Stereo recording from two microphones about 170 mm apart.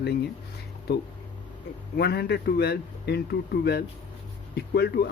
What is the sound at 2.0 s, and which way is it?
Speech, 70° left (ahead or behind).